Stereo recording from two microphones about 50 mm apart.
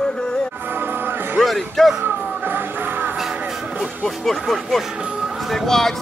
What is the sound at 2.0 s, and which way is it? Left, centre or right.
Music, right.